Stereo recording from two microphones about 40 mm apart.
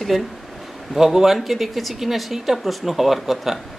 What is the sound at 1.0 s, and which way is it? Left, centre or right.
Speech, centre.